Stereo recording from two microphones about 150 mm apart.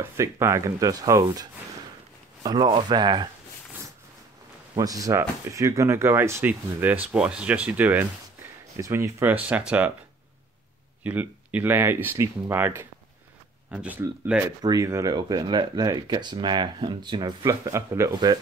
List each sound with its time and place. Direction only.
0.0 s speech: 20° right (ahead or behind)
4.7 s speech: 25° right (ahead or behind)
8.7 s speech: 20° right (ahead or behind)
11.1 s speech: 10° right (ahead or behind)
14.6 s speech: 25° right (ahead or behind)